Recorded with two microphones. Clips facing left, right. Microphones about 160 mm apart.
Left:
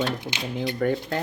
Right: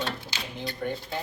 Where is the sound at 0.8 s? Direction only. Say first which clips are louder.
Left 7 dB; 85° left.